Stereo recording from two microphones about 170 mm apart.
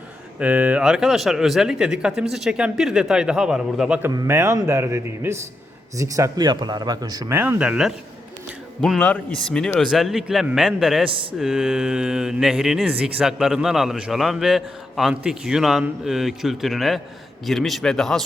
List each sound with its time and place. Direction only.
0.3 s speech: 5° right (ahead or behind)
4.1 s speech: 20° right (ahead or behind)
8.4 s a sound: centre (ahead or behind)
9.0 s speech: 10° left (ahead or behind)
11.1 s speech: 30° right (ahead or behind)
11.3 s speech: centre (ahead or behind)